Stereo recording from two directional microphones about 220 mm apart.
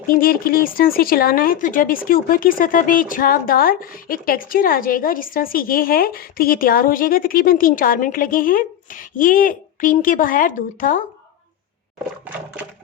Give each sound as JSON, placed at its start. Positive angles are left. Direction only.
{"t": 0.1, "sound": "speech", "side_deg": 40}